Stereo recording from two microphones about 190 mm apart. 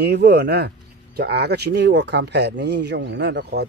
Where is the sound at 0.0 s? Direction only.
60° right (ahead or behind).